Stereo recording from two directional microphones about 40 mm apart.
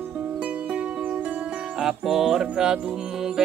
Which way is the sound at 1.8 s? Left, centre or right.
Centre.